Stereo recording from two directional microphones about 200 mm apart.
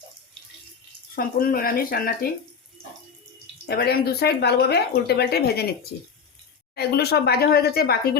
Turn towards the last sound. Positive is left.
turn(degrees=50)  # may be behind; listen again after turning